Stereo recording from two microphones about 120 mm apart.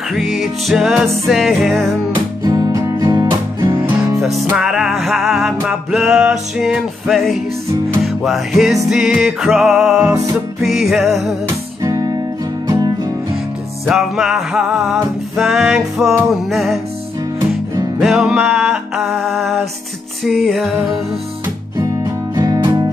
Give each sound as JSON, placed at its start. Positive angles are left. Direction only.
{"t": 0.1, "sound": "music", "side_deg": 0}
{"t": 2.4, "sound": "music", "side_deg": -30}
{"t": 3.7, "sound": "music", "side_deg": -15}
{"t": 4.6, "sound": "music", "side_deg": -5}
{"t": 11.4, "sound": "music", "side_deg": -30}
{"t": 13.8, "sound": "music", "side_deg": 0}
{"t": 18.0, "sound": "music", "side_deg": -5}
{"t": 21.7, "sound": "music", "side_deg": -30}